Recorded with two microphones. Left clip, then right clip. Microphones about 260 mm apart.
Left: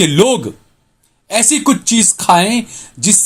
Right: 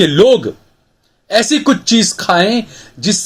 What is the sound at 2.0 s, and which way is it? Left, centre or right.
Speech, left.